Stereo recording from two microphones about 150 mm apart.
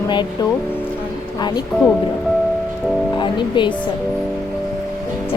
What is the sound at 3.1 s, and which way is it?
Speech, 30° left (ahead or behind).